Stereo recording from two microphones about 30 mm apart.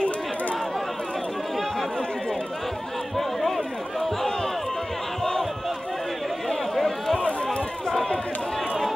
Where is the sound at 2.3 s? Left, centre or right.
Centre.